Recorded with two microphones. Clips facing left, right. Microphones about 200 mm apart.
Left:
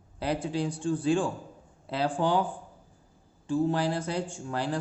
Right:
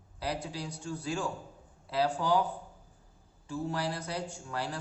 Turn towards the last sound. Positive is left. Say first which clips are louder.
# left 5 dB
turn(degrees=25)  # may be behind; listen again after turning